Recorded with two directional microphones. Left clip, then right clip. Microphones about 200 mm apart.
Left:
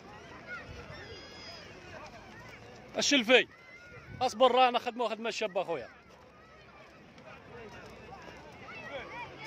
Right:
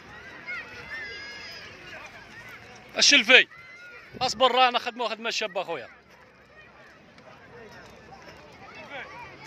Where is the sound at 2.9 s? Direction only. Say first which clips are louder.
Right 8 dB; 15° left (ahead or behind).